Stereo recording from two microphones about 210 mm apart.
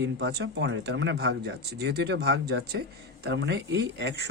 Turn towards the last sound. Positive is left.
turn(degrees=-55)  # may be behind; listen again after turning